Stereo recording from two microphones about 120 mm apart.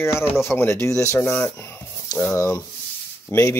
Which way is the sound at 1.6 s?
20° left (ahead or behind).